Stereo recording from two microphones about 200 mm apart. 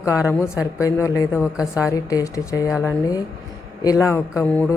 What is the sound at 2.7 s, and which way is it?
Speech, 10° right (ahead or behind).